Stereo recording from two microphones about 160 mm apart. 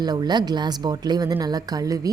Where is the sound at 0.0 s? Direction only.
25° right (ahead or behind).